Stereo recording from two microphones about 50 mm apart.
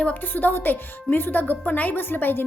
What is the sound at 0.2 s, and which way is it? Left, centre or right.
A woman's voice, left.